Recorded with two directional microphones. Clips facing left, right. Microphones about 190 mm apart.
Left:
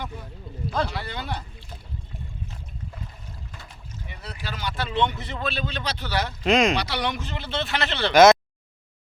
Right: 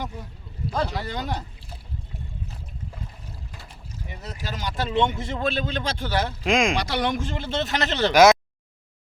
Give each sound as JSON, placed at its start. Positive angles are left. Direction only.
{"t": 0.7, "sound": "speech", "side_deg": -40}
{"t": 4.1, "sound": "speech", "side_deg": -40}
{"t": 6.4, "sound": "speech", "side_deg": -10}
{"t": 6.7, "sound": "speech", "side_deg": -45}
{"t": 8.1, "sound": "a sound", "side_deg": -10}